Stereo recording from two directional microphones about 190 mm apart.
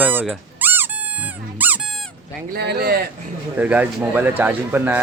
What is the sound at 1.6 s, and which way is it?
Squeak, 10° right (ahead or behind).